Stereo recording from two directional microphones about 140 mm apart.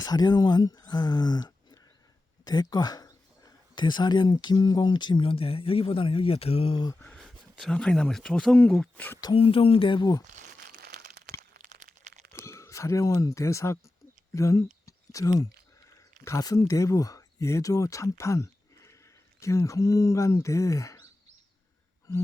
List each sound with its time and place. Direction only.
0.0 s speech: 30° left (ahead or behind)
7.0 s speech: 5° left (ahead or behind)
9.3 s speech: 40° left (ahead or behind)
10.3 s crumpling: 65° right (ahead or behind)
11.3 s a sound: 70° right (ahead or behind)
12.3 s speech: 20° left (ahead or behind)